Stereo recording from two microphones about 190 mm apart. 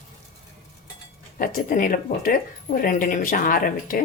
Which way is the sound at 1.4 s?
45° left (ahead or behind).